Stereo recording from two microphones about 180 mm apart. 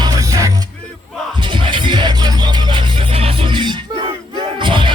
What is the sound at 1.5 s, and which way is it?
Music, 25° right (ahead or behind).